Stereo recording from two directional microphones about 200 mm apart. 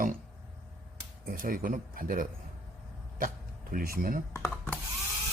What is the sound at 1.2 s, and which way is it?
Speech, 45° right (ahead or behind).